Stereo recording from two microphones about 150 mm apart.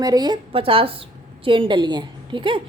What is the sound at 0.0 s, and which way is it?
A woman's voice, 25° right (ahead or behind).